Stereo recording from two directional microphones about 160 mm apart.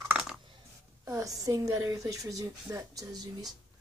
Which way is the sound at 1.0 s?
20° right (ahead or behind).